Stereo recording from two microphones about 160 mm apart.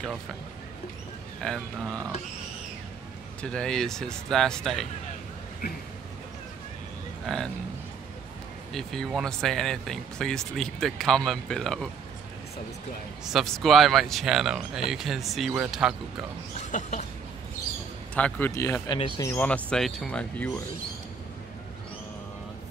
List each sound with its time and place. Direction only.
1.4 s speech: centre (ahead or behind)
3.4 s speech: 5° left (ahead or behind)
7.2 s speech: 5° left (ahead or behind)
8.7 s speech: centre (ahead or behind)
13.2 s speech: centre (ahead or behind)
16.5 s a sound: 45° left (ahead or behind)
18.1 s speech: 10° left (ahead or behind)
18.5 s speech: 20° left (ahead or behind)
18.9 s speech: 30° left (ahead or behind)
19.2 s speech: 15° left (ahead or behind)